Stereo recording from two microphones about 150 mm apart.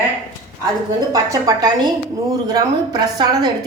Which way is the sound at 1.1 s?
25° right (ahead or behind).